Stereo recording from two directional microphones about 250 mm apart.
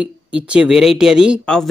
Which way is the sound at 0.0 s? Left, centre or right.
Centre.